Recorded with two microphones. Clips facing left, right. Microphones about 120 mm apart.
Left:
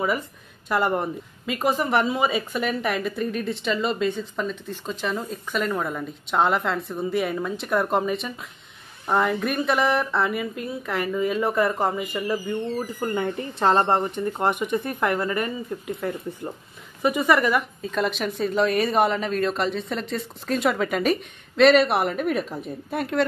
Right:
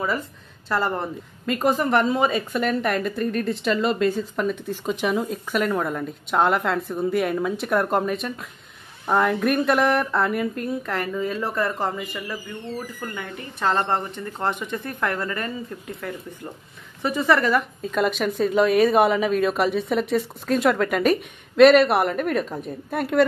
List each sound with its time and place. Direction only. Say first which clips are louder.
0.7 s a woman's voice: left 1 dB; 15° left (ahead or behind)
12.0 s speech: left 5 dB; 20° left (ahead or behind)
13.7 s a woman's voice: left 3 dB; 20° left (ahead or behind)
17.8 s a woman's voice: right 3 dB; centre (ahead or behind)